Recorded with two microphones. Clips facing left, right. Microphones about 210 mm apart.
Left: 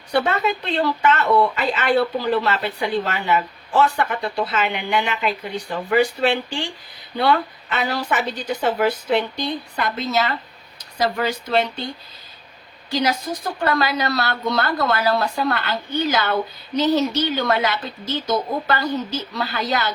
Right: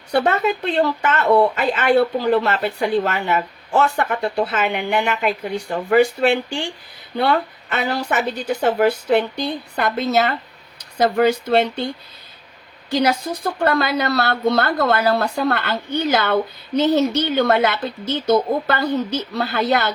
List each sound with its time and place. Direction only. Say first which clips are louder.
0.1 s speech: right 2 dB; 50° right (ahead or behind)
12.9 s a woman's voice: right 3 dB; 55° right (ahead or behind)